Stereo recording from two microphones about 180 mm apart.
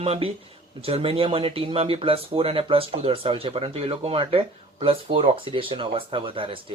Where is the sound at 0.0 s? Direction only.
35° right (ahead or behind).